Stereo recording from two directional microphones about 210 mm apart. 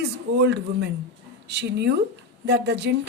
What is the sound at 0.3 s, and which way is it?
A woman's voice, 55° right (ahead or behind).